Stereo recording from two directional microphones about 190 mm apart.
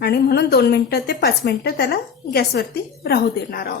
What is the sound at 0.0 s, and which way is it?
A woman's voice, 60° left (ahead or behind).